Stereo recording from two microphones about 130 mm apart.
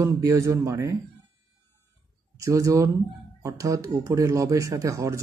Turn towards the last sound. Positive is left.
turn(degrees=-25)  # may be behind; listen again after turning